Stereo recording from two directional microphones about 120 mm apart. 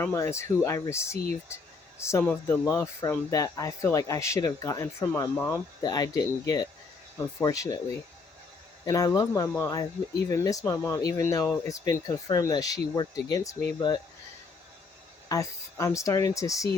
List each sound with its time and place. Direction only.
0.0 s speech: 25° left (ahead or behind)
8.8 s speech: 30° left (ahead or behind)
15.3 s speech: 25° left (ahead or behind)